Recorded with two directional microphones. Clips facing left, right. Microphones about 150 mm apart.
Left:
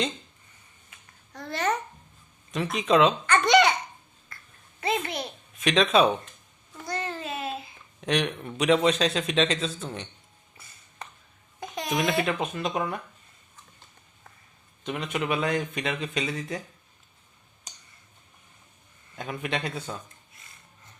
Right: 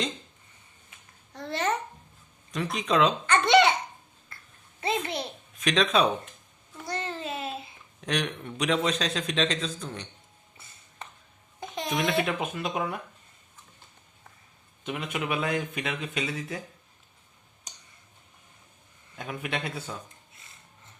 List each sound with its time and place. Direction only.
1.3 s babbling: 25° right (ahead or behind)
2.5 s a man's voice: 5° left (ahead or behind)
3.2 s a child's voice: 30° right (ahead or behind)
4.3 s finger snapping: 25° right (ahead or behind)
4.8 s a child's voice: 30° right (ahead or behind)
5.5 s a man's voice: 5° left (ahead or behind)
7.2 s a sound: 25° right (ahead or behind)
8.0 s a man's voice: 5° left (ahead or behind)
11.9 s a man's voice: centre (ahead or behind)
14.8 s a man's voice: 10° right (ahead or behind)
19.1 s a man's voice: 5° right (ahead or behind)